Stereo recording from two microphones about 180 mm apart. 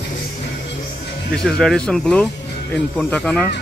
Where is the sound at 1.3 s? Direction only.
5° left (ahead or behind).